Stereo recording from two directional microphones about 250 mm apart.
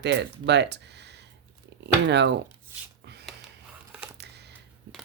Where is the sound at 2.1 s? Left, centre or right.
Right.